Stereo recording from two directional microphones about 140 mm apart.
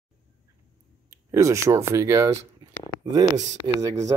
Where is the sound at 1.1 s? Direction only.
20° right (ahead or behind).